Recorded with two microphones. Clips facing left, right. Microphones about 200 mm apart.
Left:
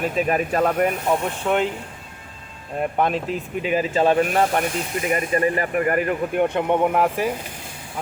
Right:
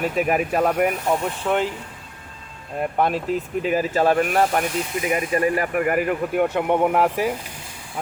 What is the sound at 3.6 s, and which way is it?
Speech, 15° left (ahead or behind).